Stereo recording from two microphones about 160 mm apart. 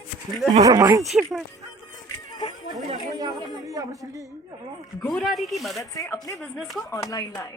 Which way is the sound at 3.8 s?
20° right (ahead or behind).